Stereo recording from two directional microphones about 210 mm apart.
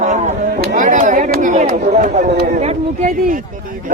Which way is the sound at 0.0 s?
35° right (ahead or behind).